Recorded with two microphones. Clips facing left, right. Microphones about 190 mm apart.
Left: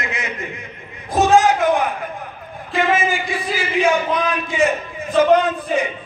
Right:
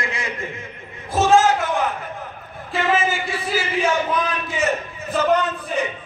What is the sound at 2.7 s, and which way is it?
A man's voice, 15° left (ahead or behind).